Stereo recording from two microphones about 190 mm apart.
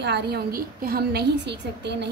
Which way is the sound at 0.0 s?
60° right (ahead or behind).